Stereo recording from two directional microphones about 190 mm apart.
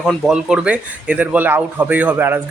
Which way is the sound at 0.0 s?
Centre (ahead or behind).